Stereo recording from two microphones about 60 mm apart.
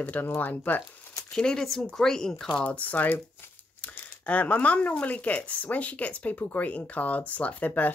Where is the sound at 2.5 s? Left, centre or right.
Left.